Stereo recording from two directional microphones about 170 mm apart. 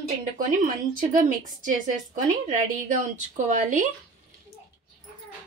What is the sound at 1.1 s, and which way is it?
A woman's voice, 50° right (ahead or behind).